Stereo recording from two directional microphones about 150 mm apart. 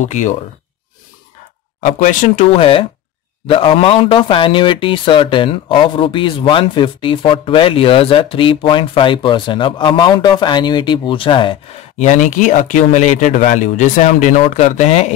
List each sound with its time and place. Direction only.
0.0 s speech: 55° left (ahead or behind)
1.8 s speech: 55° left (ahead or behind); by 11.5 s 35° left (ahead or behind)
12.0 s speech: 55° left (ahead or behind)